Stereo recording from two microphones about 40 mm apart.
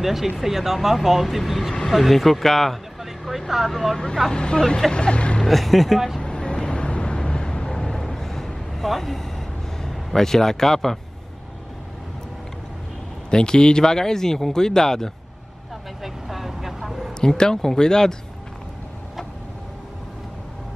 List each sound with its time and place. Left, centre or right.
0.0 s speech: centre
4.3 s speech: left
5.5 s speech: centre
6.2 s vehicle: left
8.0 s a sound: centre
9.8 s speech: centre
13.3 s speech: centre
16.0 s vehicle: centre
17.2 s speech: centre